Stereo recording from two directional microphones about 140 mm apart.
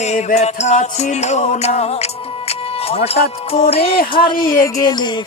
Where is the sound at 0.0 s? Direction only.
55° left (ahead or behind).